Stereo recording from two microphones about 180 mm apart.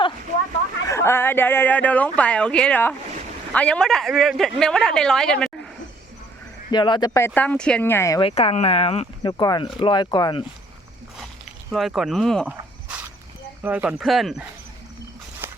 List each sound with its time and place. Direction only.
0.9 s speech: 15° left (ahead or behind)
6.7 s speech: 25° left (ahead or behind)
8.2 s speech: 30° left (ahead or behind)
11.7 s speech: centre (ahead or behind)
13.6 s speech: 10° right (ahead or behind)
15.4 s walk: 10° right (ahead or behind)